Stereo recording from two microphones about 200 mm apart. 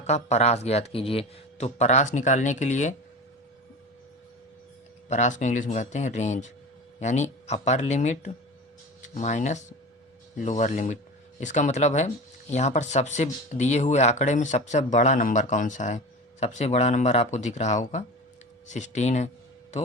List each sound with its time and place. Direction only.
0.0 s speech: 35° left (ahead or behind)
5.0 s speech: 35° left (ahead or behind)